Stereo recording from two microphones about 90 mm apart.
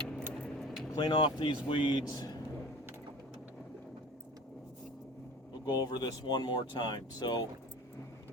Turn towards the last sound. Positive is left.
turn(degrees=50)  # may be behind; listen again after turning